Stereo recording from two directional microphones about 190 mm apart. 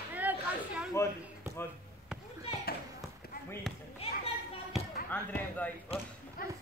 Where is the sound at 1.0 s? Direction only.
15° left (ahead or behind).